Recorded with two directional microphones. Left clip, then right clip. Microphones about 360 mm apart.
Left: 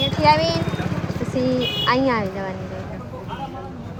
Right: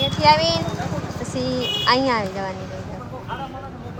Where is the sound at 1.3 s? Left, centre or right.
Centre.